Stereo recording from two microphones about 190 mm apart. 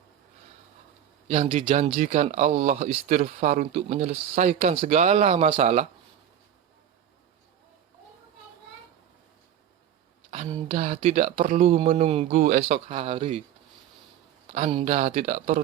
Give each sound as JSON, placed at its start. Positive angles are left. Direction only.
{"t": 1.3, "sound": "speech", "side_deg": -40}
{"t": 10.3, "sound": "speech", "side_deg": -35}
{"t": 14.7, "sound": "speech", "side_deg": -35}